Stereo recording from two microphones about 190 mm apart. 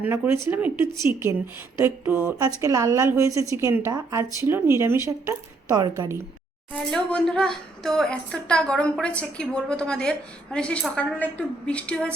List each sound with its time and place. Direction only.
0.0 s speech: 10° right (ahead or behind)
6.7 s a woman's voice: 5° left (ahead or behind)